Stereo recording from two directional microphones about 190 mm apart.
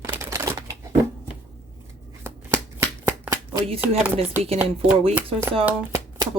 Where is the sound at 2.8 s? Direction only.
15° right (ahead or behind).